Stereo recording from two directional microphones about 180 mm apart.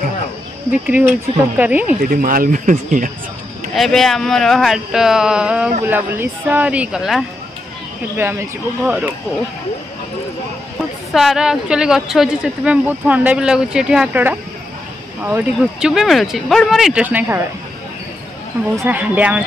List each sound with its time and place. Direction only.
0.8 s speech: 10° right (ahead or behind)
2.0 s speech: 50° right (ahead or behind)
3.7 s speech: centre (ahead or behind)
11.1 s speech: centre (ahead or behind)
18.8 s speech: 10° right (ahead or behind)